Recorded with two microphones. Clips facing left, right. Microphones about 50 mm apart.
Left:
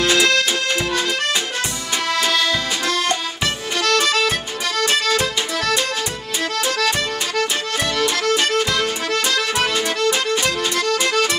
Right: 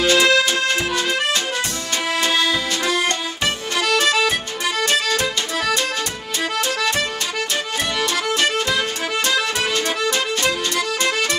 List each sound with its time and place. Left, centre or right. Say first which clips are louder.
0.0 s accordion: right 1 dB; centre
2.3 s accordion: even; centre
4.9 s music: left 2 dB; centre
6.8 s music: left 1 dB; centre
8.5 s music: left 1 dB; centre
9.8 s music: left 1 dB; centre